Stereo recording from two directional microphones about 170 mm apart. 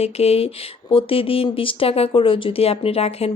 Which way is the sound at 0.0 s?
35° left (ahead or behind).